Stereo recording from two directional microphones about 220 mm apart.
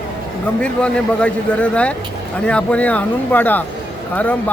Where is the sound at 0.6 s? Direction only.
5° left (ahead or behind).